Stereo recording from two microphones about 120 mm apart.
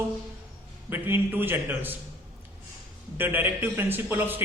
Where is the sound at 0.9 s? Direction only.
20° right (ahead or behind).